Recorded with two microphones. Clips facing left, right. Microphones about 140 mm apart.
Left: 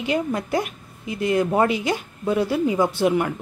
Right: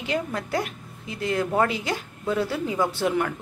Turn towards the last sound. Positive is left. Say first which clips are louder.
# left 4 dB
turn(degrees=15)  # may be behind; listen again after turning